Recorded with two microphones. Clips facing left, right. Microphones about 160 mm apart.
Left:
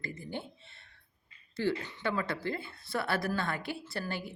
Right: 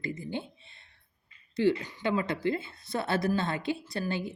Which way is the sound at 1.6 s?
20° right (ahead or behind).